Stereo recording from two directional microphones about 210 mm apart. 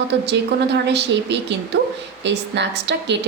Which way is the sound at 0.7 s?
55° right (ahead or behind).